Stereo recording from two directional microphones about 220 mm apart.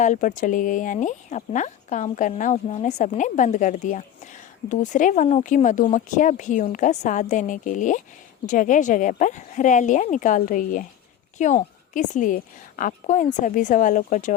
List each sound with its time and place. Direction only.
0.0 s speech: 35° left (ahead or behind)